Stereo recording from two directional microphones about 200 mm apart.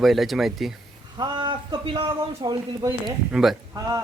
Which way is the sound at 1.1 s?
20° right (ahead or behind).